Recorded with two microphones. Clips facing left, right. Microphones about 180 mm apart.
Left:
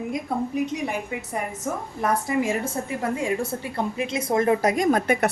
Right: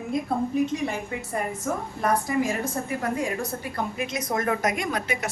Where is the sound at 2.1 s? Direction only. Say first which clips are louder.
Left 1 dB; 25° left (ahead or behind).